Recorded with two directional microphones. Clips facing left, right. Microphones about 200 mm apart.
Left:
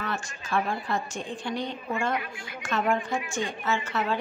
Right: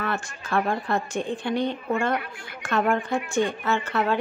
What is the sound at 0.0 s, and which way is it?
A woman's voice, 55° right (ahead or behind).